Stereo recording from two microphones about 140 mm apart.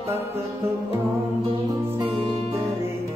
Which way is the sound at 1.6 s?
15° right (ahead or behind).